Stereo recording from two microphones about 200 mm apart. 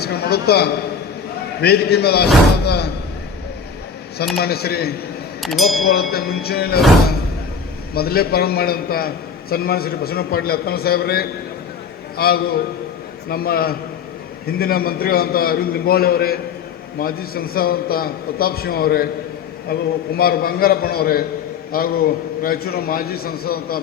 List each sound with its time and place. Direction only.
0.0 s a man's voice: 55° left (ahead or behind)
4.4 s a man's voice: 50° left (ahead or behind)
5.4 s speech: centre (ahead or behind)
5.8 s a man's voice: 50° left (ahead or behind)
7.9 s a man's voice: 50° left (ahead or behind)